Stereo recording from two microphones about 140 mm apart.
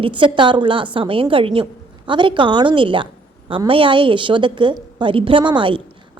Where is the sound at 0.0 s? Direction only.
35° right (ahead or behind).